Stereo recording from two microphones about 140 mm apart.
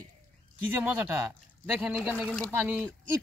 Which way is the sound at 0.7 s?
15° right (ahead or behind).